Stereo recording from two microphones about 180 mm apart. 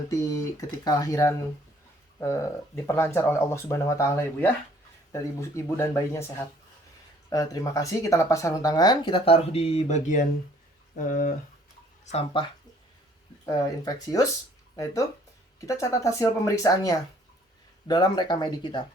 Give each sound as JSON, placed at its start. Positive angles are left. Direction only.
{"t": 0.1, "sound": "speech", "side_deg": 15}
{"t": 12.0, "sound": "speech", "side_deg": 30}
{"t": 13.4, "sound": "speech", "side_deg": 20}
{"t": 15.6, "sound": "speech", "side_deg": 20}